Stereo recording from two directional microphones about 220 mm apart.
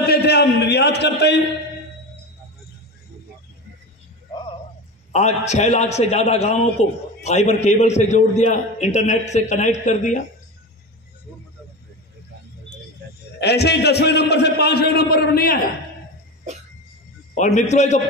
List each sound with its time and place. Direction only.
0.0 s a sound: 45° left (ahead or behind)
5.1 s a man's voice: 30° left (ahead or behind)
13.4 s a man's voice: 50° left (ahead or behind)
17.4 s a man's voice: 30° left (ahead or behind)